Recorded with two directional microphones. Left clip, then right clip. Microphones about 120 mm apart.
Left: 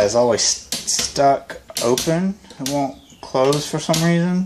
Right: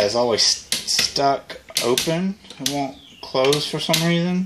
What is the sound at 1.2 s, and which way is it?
Speech, 5° left (ahead or behind).